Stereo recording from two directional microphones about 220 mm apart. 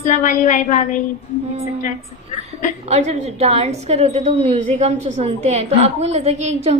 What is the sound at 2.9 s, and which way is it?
A woman's voice, 30° right (ahead or behind).